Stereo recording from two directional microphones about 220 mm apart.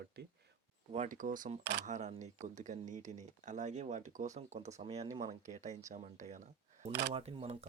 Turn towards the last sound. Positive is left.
turn(degrees=-25)  # may be behind; listen again after turning